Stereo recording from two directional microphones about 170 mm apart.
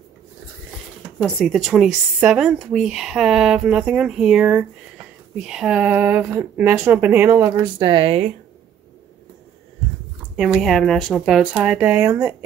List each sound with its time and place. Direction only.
1.2 s speech: centre (ahead or behind); by 7.7 s 15° right (ahead or behind)
7.8 s speech: 30° right (ahead or behind)
10.3 s speech: 5° right (ahead or behind)